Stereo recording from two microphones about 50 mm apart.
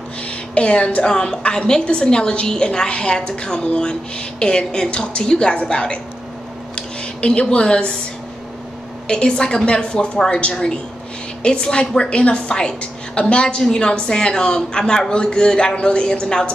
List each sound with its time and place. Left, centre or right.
0.2 s a woman's voice: left
6.7 s a sound: centre
7.5 s a woman's voice: centre
9.0 s a woman's voice: centre